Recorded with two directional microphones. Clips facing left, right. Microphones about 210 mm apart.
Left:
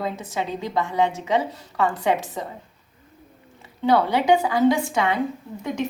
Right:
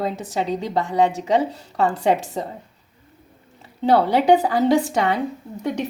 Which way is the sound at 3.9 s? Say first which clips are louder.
Right 3 dB; 35° right (ahead or behind).